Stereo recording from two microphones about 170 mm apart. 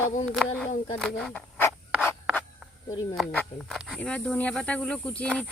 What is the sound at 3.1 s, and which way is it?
Speech, 5° left (ahead or behind).